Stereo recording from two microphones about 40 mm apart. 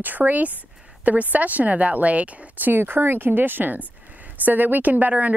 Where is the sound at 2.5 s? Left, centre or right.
Right.